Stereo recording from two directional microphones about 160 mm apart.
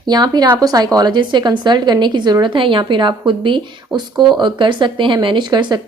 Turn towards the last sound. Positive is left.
turn(degrees=-30)  # may be behind; listen again after turning